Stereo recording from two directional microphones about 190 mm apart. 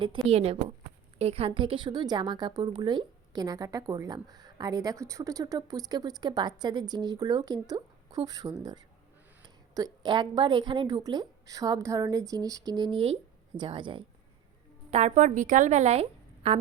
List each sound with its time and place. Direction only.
0.3 s a woman's voice: 30° right (ahead or behind)
9.7 s a woman's voice: 20° right (ahead or behind)